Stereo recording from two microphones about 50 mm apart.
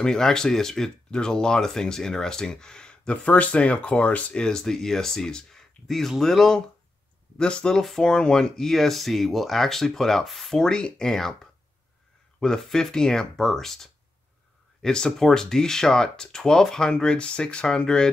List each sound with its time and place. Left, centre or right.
0.0 s speech: centre
7.3 s speech: centre
12.4 s speech: centre